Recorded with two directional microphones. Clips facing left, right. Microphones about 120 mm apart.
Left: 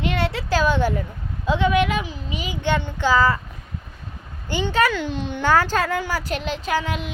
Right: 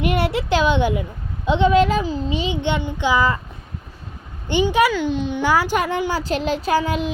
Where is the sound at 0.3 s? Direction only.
25° right (ahead or behind).